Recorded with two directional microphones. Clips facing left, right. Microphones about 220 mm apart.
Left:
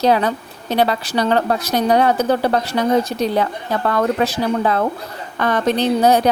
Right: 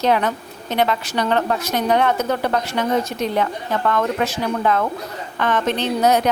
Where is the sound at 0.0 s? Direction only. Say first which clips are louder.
Left 3 dB; 35° left (ahead or behind).